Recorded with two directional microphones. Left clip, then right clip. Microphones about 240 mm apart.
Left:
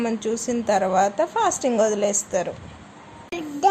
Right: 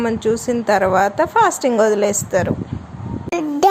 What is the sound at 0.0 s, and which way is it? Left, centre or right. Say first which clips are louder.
A woman's voice: right 7 dB; centre.